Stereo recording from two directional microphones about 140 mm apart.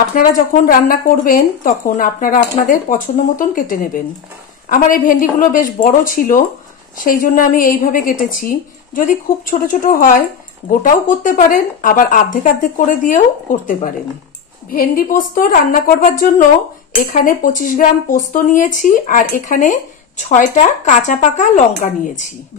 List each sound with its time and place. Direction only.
0.2 s a woman's voice: 75° left (ahead or behind)
0.7 s a woman's voice: 90° left; by 13.7 s 70° left (ahead or behind)
14.7 s a woman's voice: 90° left
17.1 s a woman's voice: 75° left (ahead or behind); by 22.3 s 60° left (ahead or behind)